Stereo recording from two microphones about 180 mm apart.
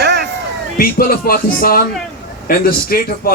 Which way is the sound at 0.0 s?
65° right (ahead or behind).